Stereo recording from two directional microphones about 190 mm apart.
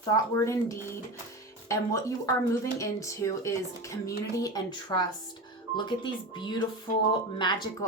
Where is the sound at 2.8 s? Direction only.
15° left (ahead or behind).